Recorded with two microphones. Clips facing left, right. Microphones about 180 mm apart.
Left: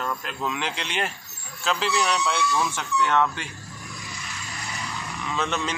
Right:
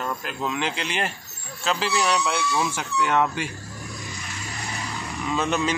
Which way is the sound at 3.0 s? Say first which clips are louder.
Right 1 dB; 15° right (ahead or behind).